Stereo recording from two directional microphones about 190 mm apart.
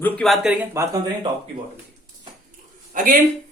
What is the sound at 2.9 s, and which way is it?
Speech, 45° right (ahead or behind).